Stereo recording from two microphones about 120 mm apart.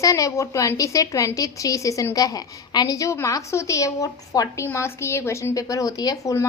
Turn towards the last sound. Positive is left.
turn(degrees=30)  # may be behind; listen again after turning